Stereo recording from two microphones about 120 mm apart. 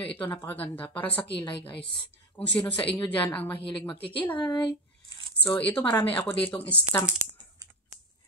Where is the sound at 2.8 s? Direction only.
15° left (ahead or behind).